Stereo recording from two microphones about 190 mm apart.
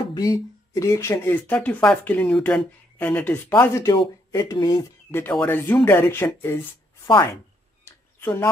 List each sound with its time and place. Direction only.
0.1 s speech: 20° left (ahead or behind)
5.1 s speech: 10° left (ahead or behind)
7.8 s a sound: 10° left (ahead or behind)